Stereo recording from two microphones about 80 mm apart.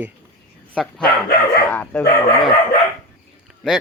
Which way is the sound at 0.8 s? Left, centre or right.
Centre.